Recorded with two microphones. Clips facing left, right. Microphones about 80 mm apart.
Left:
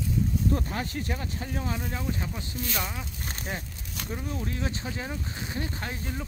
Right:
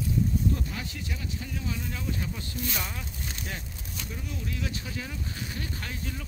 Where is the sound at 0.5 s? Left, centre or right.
Left.